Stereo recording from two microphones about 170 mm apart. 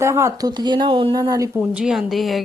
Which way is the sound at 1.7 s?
Centre (ahead or behind).